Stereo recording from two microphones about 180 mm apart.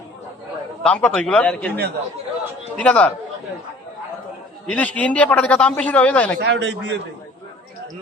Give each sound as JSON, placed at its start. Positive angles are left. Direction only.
{"t": 0.8, "sound": "a man's voice", "side_deg": 5}
{"t": 2.7, "sound": "a man's voice", "side_deg": 5}
{"t": 4.6, "sound": "a man's voice", "side_deg": 5}
{"t": 6.4, "sound": "speech", "side_deg": -75}